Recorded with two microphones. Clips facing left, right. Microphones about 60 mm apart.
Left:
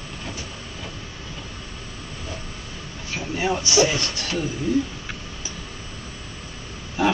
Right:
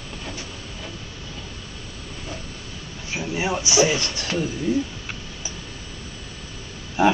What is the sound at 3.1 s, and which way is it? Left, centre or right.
Speech, centre.